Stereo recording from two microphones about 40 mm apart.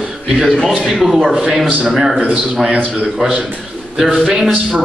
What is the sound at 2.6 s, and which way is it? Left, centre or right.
Speech, centre.